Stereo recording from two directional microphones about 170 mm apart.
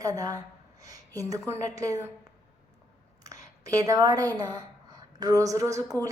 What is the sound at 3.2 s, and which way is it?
A woman's voice, 20° right (ahead or behind).